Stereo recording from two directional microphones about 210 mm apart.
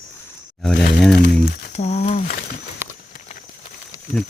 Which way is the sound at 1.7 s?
30° left (ahead or behind).